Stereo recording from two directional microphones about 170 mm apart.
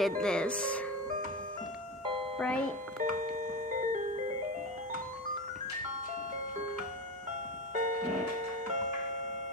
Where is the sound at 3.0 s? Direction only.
50° right (ahead or behind).